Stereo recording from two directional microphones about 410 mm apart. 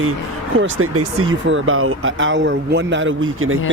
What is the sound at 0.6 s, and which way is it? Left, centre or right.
Speech, right.